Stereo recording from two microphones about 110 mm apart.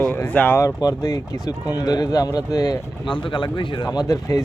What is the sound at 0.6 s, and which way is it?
Speech, 30° left (ahead or behind).